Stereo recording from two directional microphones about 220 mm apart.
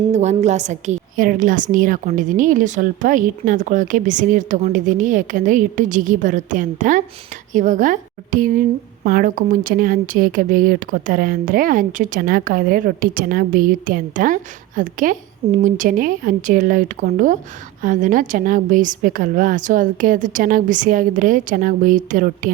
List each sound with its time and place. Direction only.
0.1 s a woman's voice: 30° right (ahead or behind)